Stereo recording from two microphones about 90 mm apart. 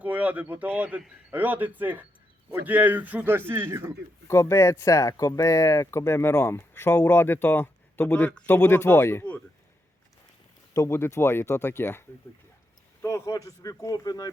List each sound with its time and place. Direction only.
0.0 s speech: 15° right (ahead or behind)
4.3 s speech: 30° left (ahead or behind)
10.8 s speech: 30° left (ahead or behind); by 14.3 s 45° left (ahead or behind)